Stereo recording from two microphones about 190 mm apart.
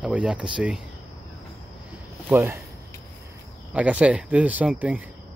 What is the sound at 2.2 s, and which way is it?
Speech, 15° right (ahead or behind).